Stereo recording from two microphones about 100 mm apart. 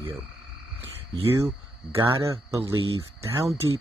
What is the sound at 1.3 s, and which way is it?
Speech, 25° right (ahead or behind).